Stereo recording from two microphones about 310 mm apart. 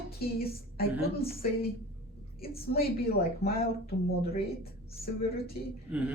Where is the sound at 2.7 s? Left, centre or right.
Left.